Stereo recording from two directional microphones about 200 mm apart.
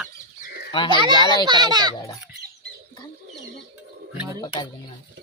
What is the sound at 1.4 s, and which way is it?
Speech, 20° right (ahead or behind).